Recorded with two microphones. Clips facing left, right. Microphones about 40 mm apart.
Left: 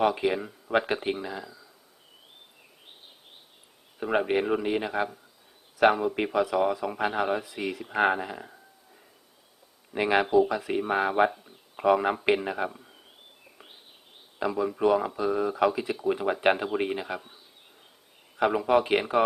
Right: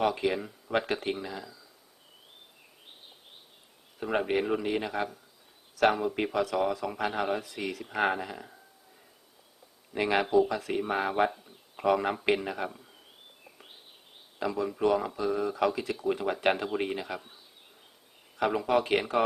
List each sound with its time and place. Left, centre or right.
0.0 s speech: centre
4.0 s speech: centre
9.9 s speech: centre
13.4 s a sound: centre
14.3 s speech: centre